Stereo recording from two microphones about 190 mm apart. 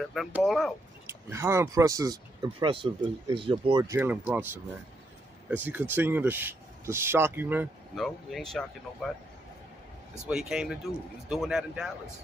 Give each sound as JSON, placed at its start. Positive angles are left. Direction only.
{"t": 0.1, "sound": "speech", "side_deg": 0}
{"t": 1.0, "sound": "speech", "side_deg": -15}
{"t": 5.6, "sound": "speech", "side_deg": -10}
{"t": 7.9, "sound": "speech", "side_deg": 0}
{"t": 10.2, "sound": "speech", "side_deg": -5}